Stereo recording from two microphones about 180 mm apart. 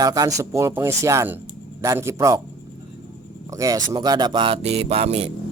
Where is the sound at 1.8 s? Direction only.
15° right (ahead or behind).